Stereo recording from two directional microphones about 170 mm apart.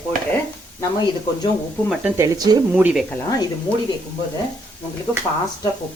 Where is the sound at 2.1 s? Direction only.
20° right (ahead or behind).